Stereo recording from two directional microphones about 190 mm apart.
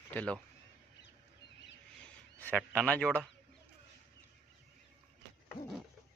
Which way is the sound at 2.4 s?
5° left (ahead or behind).